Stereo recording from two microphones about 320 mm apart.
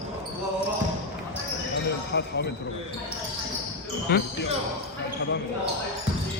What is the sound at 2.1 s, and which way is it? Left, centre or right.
Speech, left.